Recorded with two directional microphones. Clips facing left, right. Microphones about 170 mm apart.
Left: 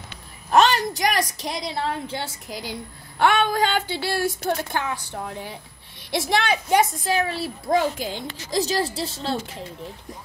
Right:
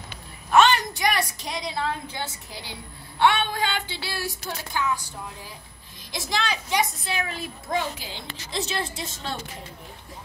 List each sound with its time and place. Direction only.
0.5 s a woman's voice: 40° left (ahead or behind)
3.2 s a woman's voice: 45° left (ahead or behind)